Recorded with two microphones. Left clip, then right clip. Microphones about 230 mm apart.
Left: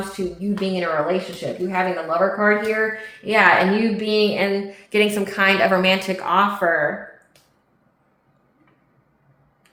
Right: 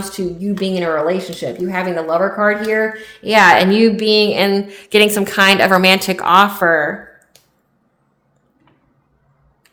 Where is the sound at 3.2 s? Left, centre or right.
Right.